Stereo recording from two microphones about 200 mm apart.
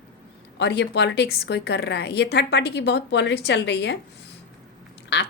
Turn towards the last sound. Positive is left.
turn(degrees=60)  # may be behind; listen again after turning